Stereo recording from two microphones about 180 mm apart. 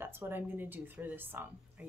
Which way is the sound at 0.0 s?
10° right (ahead or behind).